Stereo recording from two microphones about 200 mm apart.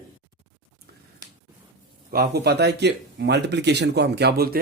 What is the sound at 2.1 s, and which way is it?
A man's voice, 50° right (ahead or behind).